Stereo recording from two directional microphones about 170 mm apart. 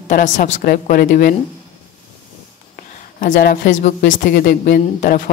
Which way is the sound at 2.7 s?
55° left (ahead or behind).